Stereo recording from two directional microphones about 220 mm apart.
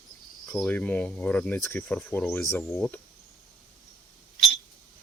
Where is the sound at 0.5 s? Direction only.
5° left (ahead or behind).